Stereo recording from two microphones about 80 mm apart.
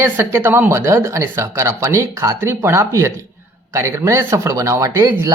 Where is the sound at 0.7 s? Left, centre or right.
Right.